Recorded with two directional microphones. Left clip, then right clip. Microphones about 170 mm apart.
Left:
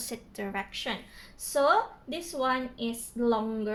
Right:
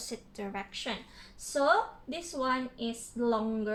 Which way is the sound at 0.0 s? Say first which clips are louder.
Left 3 dB; 35° left (ahead or behind).